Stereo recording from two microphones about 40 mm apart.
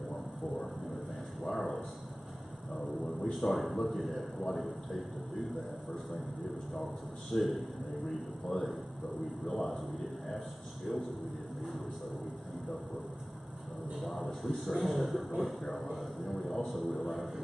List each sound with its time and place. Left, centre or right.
1.4 s a sound: centre
2.7 s a sound: centre
3.3 s speech: centre
7.2 s speech: centre
8.5 s a man's voice: centre
9.5 s speech: centre
13.9 s speech: centre